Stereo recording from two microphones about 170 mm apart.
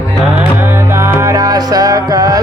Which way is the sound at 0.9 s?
15° right (ahead or behind).